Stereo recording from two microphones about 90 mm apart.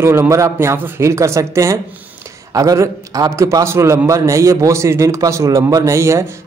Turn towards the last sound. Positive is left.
turn(degrees=-35)  # may be behind; listen again after turning